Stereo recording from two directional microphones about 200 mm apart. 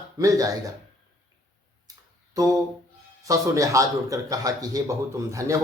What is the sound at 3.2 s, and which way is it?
A man's voice, 15° right (ahead or behind).